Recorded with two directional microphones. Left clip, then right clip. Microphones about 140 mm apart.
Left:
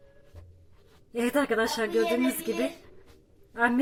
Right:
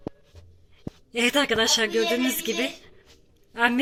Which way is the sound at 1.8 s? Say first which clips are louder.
Right 2 dB; 15° right (ahead or behind).